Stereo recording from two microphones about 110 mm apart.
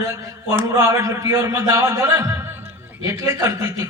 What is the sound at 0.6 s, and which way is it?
A man's voice, 30° right (ahead or behind).